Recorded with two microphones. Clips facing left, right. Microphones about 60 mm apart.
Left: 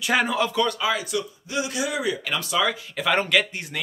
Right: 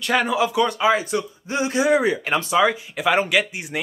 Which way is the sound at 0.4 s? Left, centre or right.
Centre.